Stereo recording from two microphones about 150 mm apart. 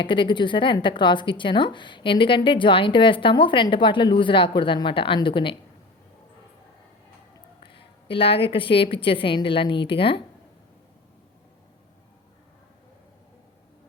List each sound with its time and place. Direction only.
0.0 s speech: 30° left (ahead or behind)
7.6 s speech: 35° left (ahead or behind)